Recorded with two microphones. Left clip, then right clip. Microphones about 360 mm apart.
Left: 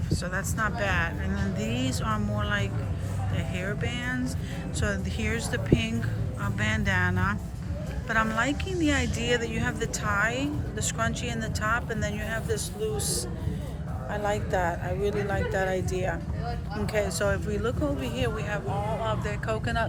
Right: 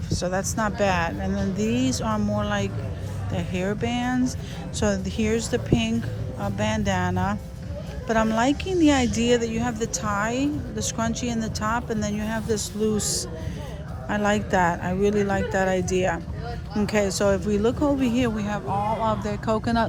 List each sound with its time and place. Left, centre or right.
0.1 s a woman's voice: centre